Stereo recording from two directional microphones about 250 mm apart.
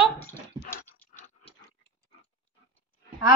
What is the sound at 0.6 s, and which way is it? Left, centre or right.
Dog, left.